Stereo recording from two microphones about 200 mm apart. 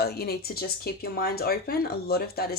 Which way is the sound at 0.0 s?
50° left (ahead or behind).